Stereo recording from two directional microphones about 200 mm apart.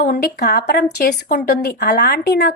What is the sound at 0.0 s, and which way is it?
A woman's voice, 50° left (ahead or behind).